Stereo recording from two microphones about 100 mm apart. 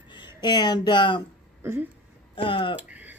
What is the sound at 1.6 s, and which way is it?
Speech, 25° right (ahead or behind).